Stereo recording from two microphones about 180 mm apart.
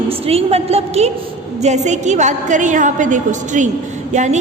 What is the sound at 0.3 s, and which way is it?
A woman's voice, 35° right (ahead or behind).